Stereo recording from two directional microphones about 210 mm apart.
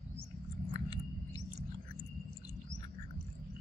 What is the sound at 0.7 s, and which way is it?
Chewing, 20° left (ahead or behind).